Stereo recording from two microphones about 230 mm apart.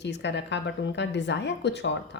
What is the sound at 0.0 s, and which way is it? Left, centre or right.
A woman's voice, left.